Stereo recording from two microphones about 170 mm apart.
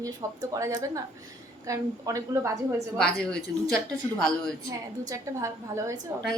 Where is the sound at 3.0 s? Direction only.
5° left (ahead or behind).